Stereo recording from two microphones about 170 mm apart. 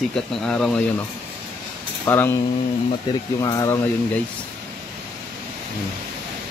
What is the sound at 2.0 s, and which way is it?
Speech, 15° left (ahead or behind).